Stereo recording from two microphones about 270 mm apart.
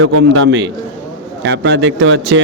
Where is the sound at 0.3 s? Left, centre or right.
Right.